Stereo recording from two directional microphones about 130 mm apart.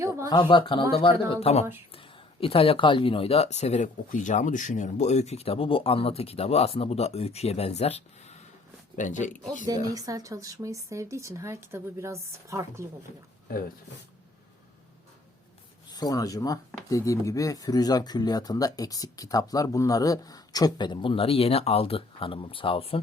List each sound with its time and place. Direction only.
0.3 s speech: 35° left (ahead or behind); by 8.4 s 55° left (ahead or behind)
9.0 s speech: 70° left (ahead or behind)
9.6 s speech: 30° right (ahead or behind)
15.9 s speech: 30° left (ahead or behind)